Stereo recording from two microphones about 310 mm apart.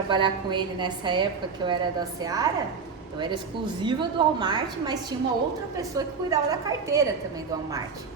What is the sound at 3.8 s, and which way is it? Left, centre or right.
A woman's voice, centre.